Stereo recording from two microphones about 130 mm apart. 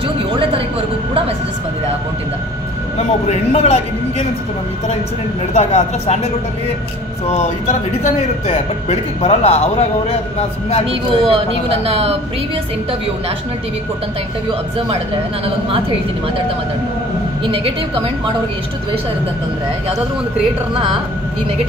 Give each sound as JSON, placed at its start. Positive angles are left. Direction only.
{"t": 3.3, "sound": "speech", "side_deg": 55}
{"t": 5.5, "sound": "speech", "side_deg": 60}
{"t": 7.2, "sound": "speech", "side_deg": 60}
{"t": 10.9, "sound": "a woman's voice", "side_deg": -45}
{"t": 17.5, "sound": "a woman's voice", "side_deg": -45}